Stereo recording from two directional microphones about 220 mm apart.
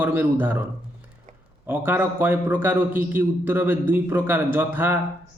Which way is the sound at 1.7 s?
10° right (ahead or behind).